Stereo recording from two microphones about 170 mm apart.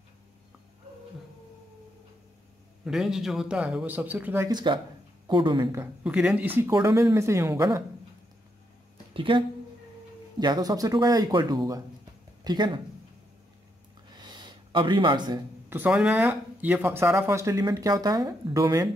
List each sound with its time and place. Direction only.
2.8 s a man's voice: centre (ahead or behind)
4.5 s speech: 25° right (ahead or behind)
6.0 s speech: 5° right (ahead or behind)
9.1 s speech: 30° right (ahead or behind)
10.4 s speech: 25° right (ahead or behind)
14.1 s gasp: 25° right (ahead or behind)
15.9 s speech: 5° right (ahead or behind)